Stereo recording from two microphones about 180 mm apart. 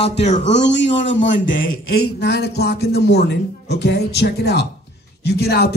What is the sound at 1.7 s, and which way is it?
Speech, 65° left (ahead or behind).